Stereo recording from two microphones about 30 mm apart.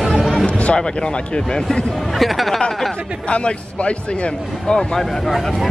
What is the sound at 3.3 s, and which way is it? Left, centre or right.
Speech, left.